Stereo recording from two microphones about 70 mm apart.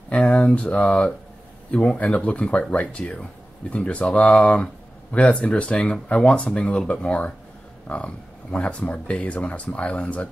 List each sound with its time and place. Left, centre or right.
0.1 s speech: centre